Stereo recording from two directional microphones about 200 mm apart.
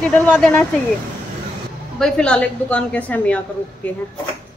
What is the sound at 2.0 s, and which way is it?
A woman's voice, 5° left (ahead or behind).